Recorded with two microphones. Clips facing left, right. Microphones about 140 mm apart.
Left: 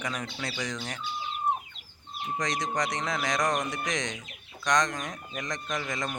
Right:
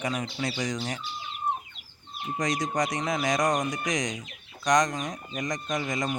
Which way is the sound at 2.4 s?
20° right (ahead or behind).